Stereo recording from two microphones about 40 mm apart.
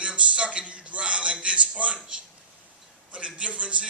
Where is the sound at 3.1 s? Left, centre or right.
Right.